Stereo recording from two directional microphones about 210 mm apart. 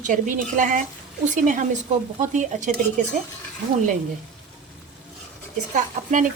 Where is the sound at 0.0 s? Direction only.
35° right (ahead or behind).